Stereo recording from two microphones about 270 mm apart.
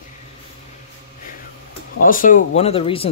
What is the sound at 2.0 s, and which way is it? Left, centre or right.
Speech, left.